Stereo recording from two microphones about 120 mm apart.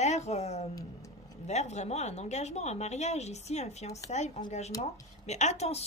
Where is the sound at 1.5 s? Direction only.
70° left (ahead or behind).